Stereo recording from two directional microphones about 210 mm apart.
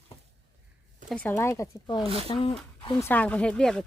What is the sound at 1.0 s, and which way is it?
Speech, 5° left (ahead or behind).